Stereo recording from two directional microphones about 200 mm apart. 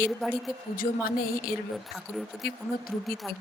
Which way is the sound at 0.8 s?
45° left (ahead or behind).